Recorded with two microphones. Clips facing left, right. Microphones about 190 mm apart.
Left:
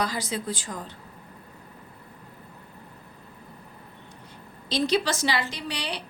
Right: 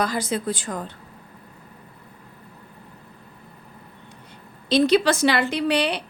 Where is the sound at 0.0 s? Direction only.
50° right (ahead or behind).